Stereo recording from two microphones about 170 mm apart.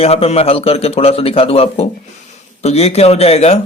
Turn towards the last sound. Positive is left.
turn(degrees=40)  # may be behind; listen again after turning